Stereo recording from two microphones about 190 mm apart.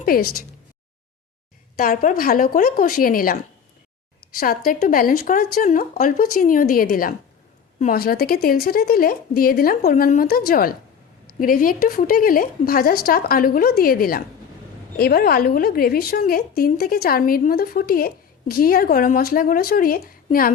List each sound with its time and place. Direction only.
0.0 s a woman's voice: 50° left (ahead or behind)
1.7 s a woman's voice: 50° left (ahead or behind)
4.4 s a woman's voice: 50° left (ahead or behind)